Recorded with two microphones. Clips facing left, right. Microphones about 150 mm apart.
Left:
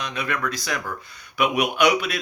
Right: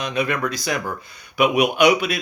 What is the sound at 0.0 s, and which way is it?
Speech, 20° right (ahead or behind).